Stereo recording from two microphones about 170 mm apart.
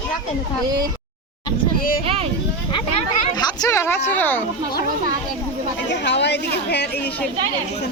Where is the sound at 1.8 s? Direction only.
60° left (ahead or behind).